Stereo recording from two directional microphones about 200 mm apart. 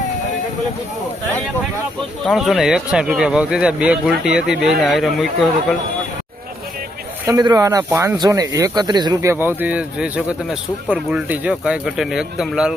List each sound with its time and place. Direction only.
2.2 s speech: centre (ahead or behind)
7.3 s speech: 20° right (ahead or behind); by 12.7 s 5° right (ahead or behind)